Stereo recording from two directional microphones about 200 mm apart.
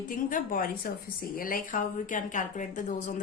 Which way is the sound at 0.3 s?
45° left (ahead or behind).